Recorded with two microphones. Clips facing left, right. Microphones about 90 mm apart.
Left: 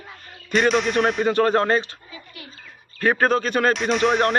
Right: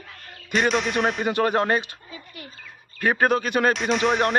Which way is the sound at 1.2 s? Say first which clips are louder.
Left 4 dB; 15° right (ahead or behind).